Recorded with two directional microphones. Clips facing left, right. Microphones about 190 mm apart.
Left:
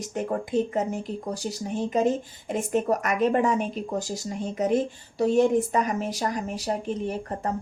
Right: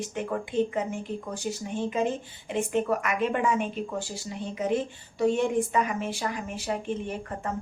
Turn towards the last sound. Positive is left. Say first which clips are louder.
# left 4 dB
turn(degrees=40)  # may be behind; listen again after turning